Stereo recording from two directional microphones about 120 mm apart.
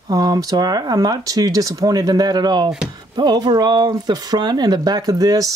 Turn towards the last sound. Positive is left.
turn(degrees=-30)  # may be behind; listen again after turning